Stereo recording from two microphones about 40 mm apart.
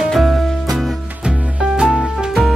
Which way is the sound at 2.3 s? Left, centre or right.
Centre.